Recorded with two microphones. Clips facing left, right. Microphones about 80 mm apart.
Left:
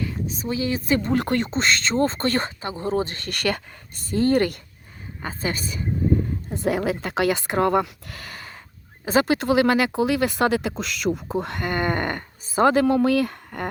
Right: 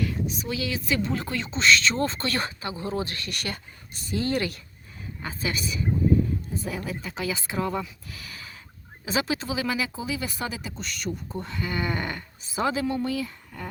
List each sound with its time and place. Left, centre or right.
0.3 s speech: left
3.2 s speech: left
4.1 s speech: left
6.5 s speech: left